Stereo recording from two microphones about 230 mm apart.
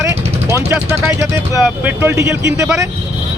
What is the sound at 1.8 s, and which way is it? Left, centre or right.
Speech, centre.